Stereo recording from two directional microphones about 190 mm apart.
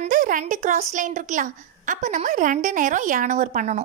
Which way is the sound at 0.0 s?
45° right (ahead or behind).